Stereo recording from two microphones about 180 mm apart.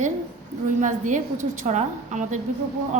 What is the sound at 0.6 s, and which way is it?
A woman's voice, 45° right (ahead or behind).